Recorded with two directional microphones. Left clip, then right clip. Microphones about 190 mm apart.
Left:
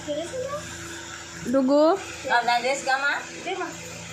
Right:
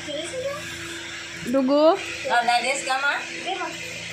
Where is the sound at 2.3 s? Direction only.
50° left (ahead or behind).